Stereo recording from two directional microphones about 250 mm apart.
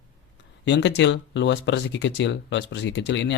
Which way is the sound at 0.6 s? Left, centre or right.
Left.